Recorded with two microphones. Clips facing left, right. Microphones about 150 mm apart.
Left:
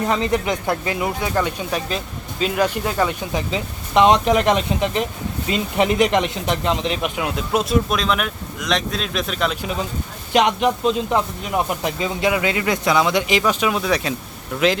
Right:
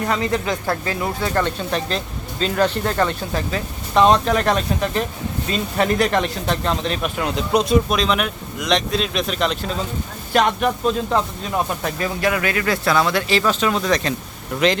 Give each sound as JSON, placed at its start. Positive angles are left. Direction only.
{"t": 0.1, "sound": "speech", "side_deg": 20}
{"t": 7.2, "sound": "speech", "side_deg": 5}
{"t": 10.3, "sound": "speech", "side_deg": 20}